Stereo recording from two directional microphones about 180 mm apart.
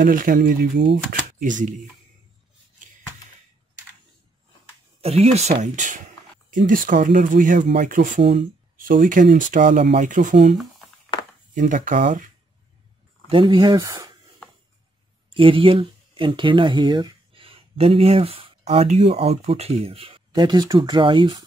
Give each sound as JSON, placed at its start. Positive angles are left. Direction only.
{"t": 0.0, "sound": "speech", "side_deg": -50}
{"t": 5.0, "sound": "speech", "side_deg": -35}
{"t": 8.2, "sound": "speech", "side_deg": -30}
{"t": 8.7, "sound": "speech", "side_deg": -50}
{"t": 11.5, "sound": "speech", "side_deg": -45}
{"t": 13.3, "sound": "speech", "side_deg": -25}
{"t": 15.2, "sound": "speech", "side_deg": -30}